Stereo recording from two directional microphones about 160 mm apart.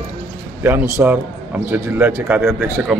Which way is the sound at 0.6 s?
15° right (ahead or behind).